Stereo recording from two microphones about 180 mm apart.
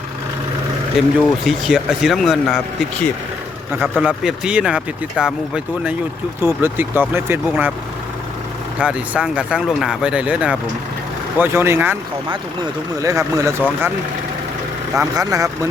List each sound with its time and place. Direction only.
0.9 s speech: centre (ahead or behind)
3.8 s speech: centre (ahead or behind)
8.8 s speech: 5° right (ahead or behind)
13.0 s speech: 20° right (ahead or behind)
14.9 s speech: 20° right (ahead or behind)